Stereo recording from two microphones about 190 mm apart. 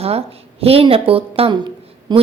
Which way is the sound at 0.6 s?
30° right (ahead or behind).